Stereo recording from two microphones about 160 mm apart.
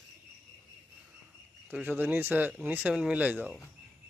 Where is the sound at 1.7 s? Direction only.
5° right (ahead or behind).